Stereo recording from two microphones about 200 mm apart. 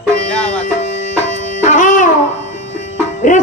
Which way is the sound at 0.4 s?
35° left (ahead or behind).